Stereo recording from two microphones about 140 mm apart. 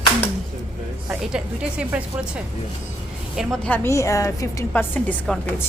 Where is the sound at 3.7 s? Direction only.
20° left (ahead or behind).